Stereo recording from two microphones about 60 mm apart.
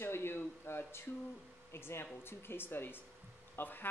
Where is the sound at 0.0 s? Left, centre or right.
Left.